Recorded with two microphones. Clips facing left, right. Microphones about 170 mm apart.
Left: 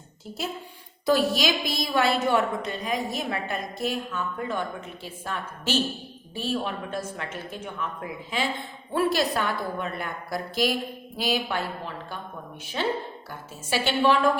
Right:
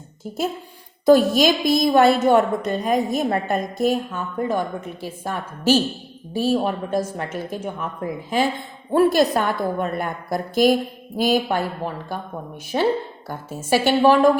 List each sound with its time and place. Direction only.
1.0 s a woman's voice: 45° right (ahead or behind)
13.2 s a woman's voice: 45° right (ahead or behind)